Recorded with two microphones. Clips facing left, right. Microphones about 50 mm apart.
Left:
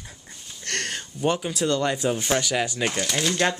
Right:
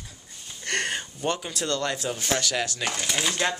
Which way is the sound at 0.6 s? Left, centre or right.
Centre.